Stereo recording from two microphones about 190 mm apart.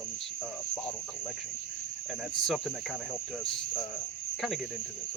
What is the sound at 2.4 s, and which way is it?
Speech, centre (ahead or behind).